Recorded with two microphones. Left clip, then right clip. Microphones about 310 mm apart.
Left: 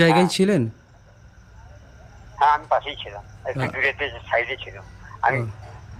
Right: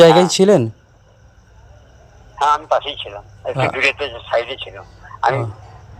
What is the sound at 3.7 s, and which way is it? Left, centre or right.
Speech, right.